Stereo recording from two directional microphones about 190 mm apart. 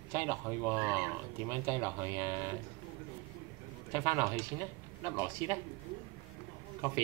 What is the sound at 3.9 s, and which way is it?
Speech, 15° right (ahead or behind).